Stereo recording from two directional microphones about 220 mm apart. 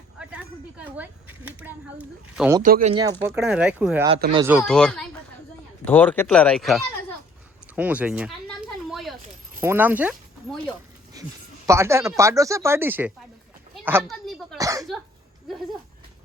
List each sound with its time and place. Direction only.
0.2 s speech: 5° right (ahead or behind)
2.6 s speech: 35° right (ahead or behind)
2.9 s speech: 15° right (ahead or behind)
3.3 s speech: 5° right (ahead or behind)
8.4 s a sound: centre (ahead or behind)
9.6 s speech: 10° right (ahead or behind)
13.8 s a sound: 5° right (ahead or behind)
14.6 s cough: 15° right (ahead or behind)